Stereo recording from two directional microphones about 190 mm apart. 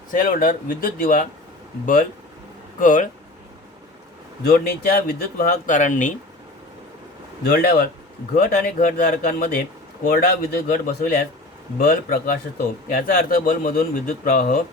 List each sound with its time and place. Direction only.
0.1 s speech: 45° left (ahead or behind)
2.7 s speech: 45° left (ahead or behind)
4.4 s speech: 50° left (ahead or behind)
7.4 s speech: 50° left (ahead or behind)